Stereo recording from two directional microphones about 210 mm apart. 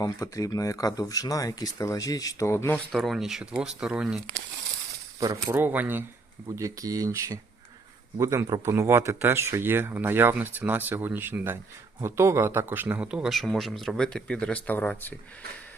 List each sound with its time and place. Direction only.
0.0 s speech: 15° left (ahead or behind); by 4.2 s 5° right (ahead or behind)
5.2 s speech: 10° right (ahead or behind); by 15.1 s 10° left (ahead or behind)